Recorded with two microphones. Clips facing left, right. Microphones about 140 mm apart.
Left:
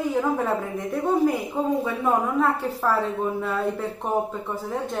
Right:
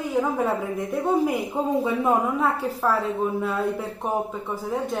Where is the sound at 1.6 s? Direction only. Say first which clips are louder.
Even; 15° right (ahead or behind).